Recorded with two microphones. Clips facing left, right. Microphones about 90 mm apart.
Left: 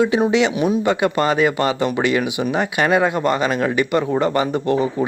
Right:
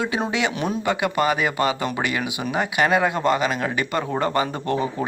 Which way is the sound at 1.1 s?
15° right (ahead or behind).